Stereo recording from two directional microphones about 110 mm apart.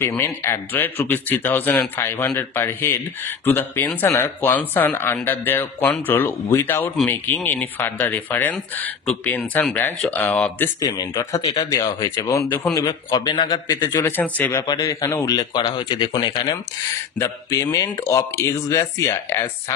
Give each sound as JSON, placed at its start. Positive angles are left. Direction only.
{"t": 0.2, "sound": "speech", "side_deg": 25}
{"t": 10.8, "sound": "a man's voice", "side_deg": 35}
{"t": 13.8, "sound": "speech", "side_deg": 25}
{"t": 14.7, "sound": "a man's voice", "side_deg": 30}
{"t": 15.5, "sound": "speech", "side_deg": 50}
{"t": 17.2, "sound": "speech", "side_deg": 30}